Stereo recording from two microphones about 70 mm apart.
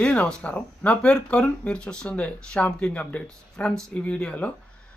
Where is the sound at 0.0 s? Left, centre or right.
Centre.